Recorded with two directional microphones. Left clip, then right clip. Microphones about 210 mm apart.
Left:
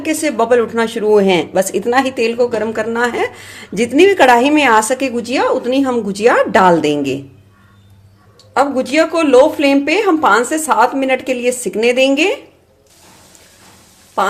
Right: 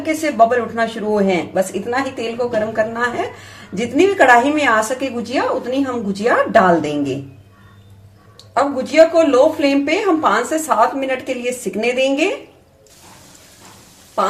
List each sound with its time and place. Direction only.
0.0 s speech: 40° left (ahead or behind)
8.5 s speech: 40° left (ahead or behind)
14.2 s speech: 40° left (ahead or behind)